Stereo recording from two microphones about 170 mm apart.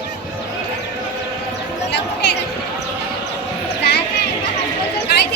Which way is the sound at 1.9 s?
85° left.